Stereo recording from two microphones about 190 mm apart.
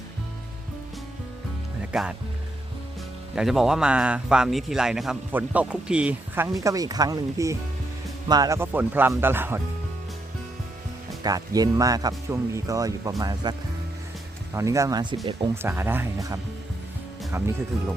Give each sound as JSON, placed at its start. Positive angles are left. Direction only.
{"t": 1.9, "sound": "speech", "side_deg": -5}
{"t": 3.3, "sound": "speech", "side_deg": 0}
{"t": 11.2, "sound": "speech", "side_deg": -20}